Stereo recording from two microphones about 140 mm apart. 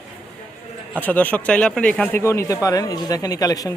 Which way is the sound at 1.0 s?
10° left (ahead or behind).